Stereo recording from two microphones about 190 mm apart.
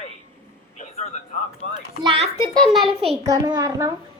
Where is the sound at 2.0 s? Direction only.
30° right (ahead or behind).